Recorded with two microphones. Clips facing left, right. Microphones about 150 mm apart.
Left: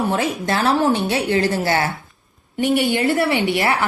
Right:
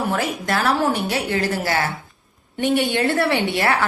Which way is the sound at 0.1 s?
25° left (ahead or behind).